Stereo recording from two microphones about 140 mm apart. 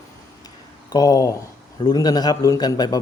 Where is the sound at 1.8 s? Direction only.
30° left (ahead or behind).